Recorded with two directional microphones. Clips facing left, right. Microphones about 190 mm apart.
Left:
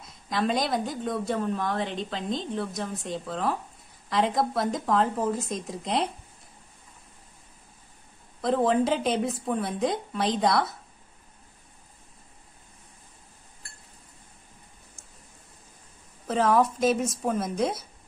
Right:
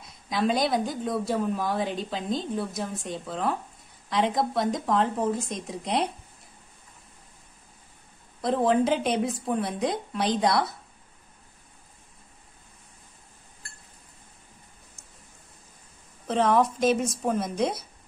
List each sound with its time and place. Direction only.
0.3 s a woman's voice: centre (ahead or behind)
8.4 s a woman's voice: centre (ahead or behind)
15.0 s rain: 45° left (ahead or behind)
16.3 s a woman's voice: centre (ahead or behind)